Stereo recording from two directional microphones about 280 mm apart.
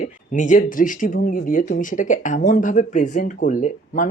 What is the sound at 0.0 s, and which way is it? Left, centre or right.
Speech, left.